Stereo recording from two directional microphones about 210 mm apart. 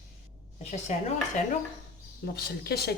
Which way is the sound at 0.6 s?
30° left (ahead or behind).